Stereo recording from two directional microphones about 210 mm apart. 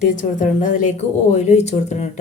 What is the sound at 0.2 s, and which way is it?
A woman's voice, 40° left (ahead or behind).